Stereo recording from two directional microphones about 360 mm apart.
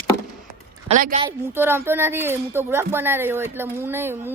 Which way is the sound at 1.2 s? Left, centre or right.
Centre.